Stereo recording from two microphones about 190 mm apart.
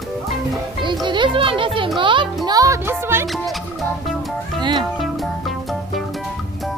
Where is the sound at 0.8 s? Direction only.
25° right (ahead or behind).